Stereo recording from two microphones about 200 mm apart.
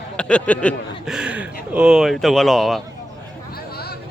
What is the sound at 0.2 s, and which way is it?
Speech, 5° left (ahead or behind).